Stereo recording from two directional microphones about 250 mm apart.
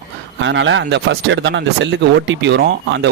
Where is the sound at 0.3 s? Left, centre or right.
Right.